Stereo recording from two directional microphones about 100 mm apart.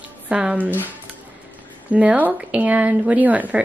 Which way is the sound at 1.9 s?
15° right (ahead or behind).